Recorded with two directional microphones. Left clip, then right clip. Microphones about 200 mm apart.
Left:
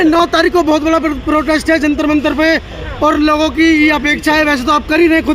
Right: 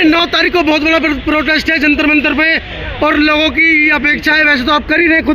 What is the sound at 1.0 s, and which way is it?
Speech, 20° right (ahead or behind).